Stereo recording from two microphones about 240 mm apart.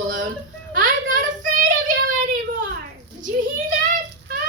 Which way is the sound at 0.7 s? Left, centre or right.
Right.